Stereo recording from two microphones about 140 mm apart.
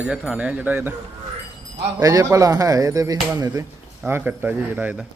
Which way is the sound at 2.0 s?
25° right (ahead or behind).